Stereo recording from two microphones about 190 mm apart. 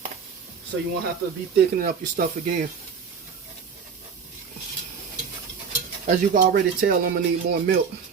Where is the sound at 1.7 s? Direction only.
45° right (ahead or behind).